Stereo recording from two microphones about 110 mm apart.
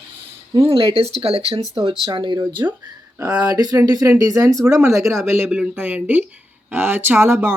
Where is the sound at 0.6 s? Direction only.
60° right (ahead or behind).